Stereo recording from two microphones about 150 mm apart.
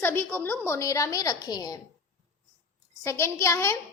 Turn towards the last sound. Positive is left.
turn(degrees=20)  # may be behind; listen again after turning